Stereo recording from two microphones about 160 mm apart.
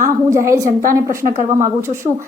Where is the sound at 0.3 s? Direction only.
20° right (ahead or behind).